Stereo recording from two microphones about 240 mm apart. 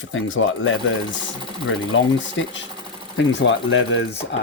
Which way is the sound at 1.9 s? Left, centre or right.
Left.